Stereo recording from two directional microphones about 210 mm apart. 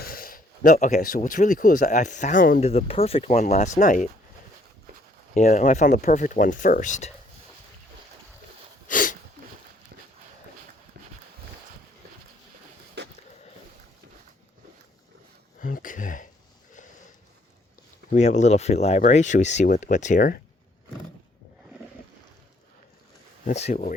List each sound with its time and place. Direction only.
0.0 s speech: 45° left (ahead or behind)
2.6 s speech: 30° left (ahead or behind)
5.3 s speech: 35° left (ahead or behind)
8.9 s sneeze: 40° left (ahead or behind)
13.0 s a sound: 55° right (ahead or behind)
15.6 s speech: 40° left (ahead or behind)
18.1 s speech: 35° left (ahead or behind)
23.6 s speech: 35° left (ahead or behind)